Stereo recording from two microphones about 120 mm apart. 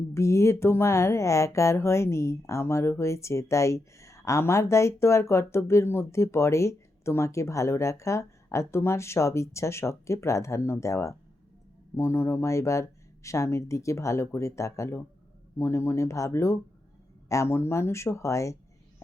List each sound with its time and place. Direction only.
0.1 s speech: 25° left (ahead or behind)